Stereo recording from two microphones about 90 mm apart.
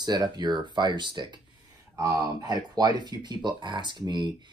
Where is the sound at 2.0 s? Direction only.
40° right (ahead or behind).